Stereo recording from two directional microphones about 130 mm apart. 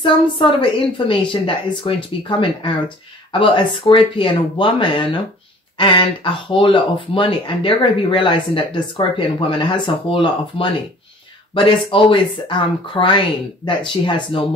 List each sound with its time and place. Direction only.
0.0 s speech: 40° left (ahead or behind)